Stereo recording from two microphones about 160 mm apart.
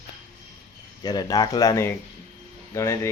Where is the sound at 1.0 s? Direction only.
25° left (ahead or behind).